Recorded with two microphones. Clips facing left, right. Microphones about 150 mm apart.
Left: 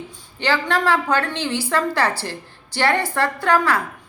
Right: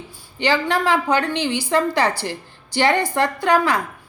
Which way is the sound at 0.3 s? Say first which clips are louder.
Right 1 dB; 15° right (ahead or behind).